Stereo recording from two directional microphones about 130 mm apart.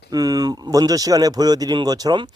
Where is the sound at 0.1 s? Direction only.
30° right (ahead or behind).